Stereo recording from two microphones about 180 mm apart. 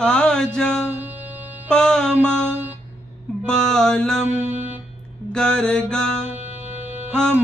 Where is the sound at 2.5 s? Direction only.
10° right (ahead or behind).